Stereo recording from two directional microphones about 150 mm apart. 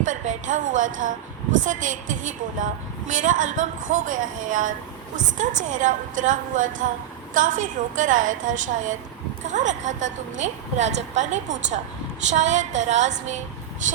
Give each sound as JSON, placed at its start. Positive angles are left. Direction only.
{"t": 0.0, "sound": "a woman's voice", "side_deg": -60}